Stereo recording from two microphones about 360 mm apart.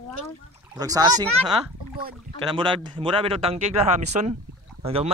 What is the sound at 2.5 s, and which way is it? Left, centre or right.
Speech, centre.